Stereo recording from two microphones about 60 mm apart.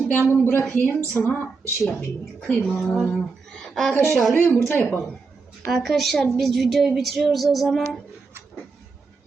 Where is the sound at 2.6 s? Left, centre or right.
Centre.